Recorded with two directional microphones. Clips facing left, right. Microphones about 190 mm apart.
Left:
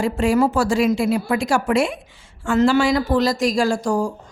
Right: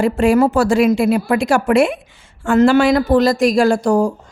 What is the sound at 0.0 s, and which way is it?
A woman's voice, 60° right (ahead or behind).